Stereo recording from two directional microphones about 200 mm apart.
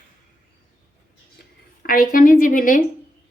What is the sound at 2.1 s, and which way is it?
Speech, 40° left (ahead or behind).